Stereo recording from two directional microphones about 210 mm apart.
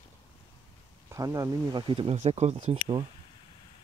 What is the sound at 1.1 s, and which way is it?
Speech, 15° right (ahead or behind).